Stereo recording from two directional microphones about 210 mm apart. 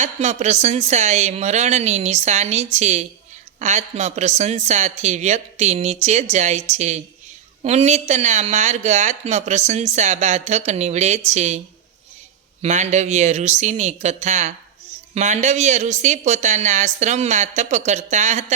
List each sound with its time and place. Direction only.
0.0 s speech: 35° right (ahead or behind)
12.6 s speech: 35° right (ahead or behind)